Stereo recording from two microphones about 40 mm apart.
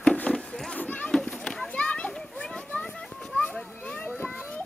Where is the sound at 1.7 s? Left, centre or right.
Left.